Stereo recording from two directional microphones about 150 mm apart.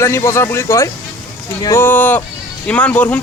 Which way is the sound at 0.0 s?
20° left (ahead or behind).